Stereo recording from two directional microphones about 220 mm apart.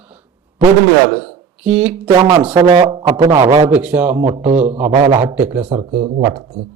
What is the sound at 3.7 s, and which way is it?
A man's voice, 5° right (ahead or behind).